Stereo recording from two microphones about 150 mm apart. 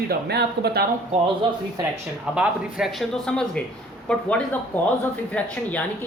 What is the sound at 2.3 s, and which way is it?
Speech, 5° right (ahead or behind).